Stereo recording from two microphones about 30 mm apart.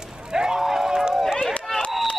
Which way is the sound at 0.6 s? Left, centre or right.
Centre.